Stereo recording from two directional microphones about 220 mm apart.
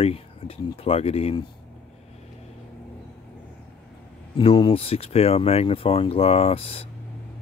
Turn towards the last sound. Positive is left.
turn(degrees=25)  # may be behind; listen again after turning